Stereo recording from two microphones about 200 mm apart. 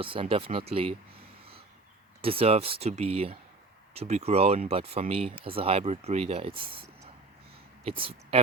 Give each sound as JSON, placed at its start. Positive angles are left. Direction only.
{"t": 0.0, "sound": "speech", "side_deg": -25}
{"t": 2.2, "sound": "speech", "side_deg": -30}
{"t": 7.9, "sound": "speech", "side_deg": -25}